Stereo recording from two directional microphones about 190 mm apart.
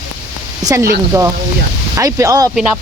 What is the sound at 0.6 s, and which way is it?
Speech, 20° right (ahead or behind).